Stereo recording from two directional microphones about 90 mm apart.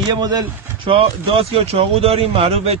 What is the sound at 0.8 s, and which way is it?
Speech, 90° right.